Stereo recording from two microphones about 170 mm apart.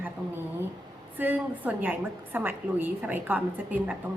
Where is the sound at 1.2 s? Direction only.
10° right (ahead or behind).